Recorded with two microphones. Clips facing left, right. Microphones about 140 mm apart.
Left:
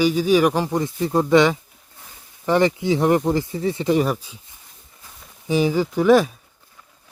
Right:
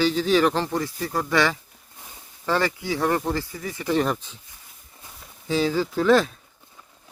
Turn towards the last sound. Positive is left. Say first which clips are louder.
# left 4 dB
turn(degrees=10)  # may be behind; listen again after turning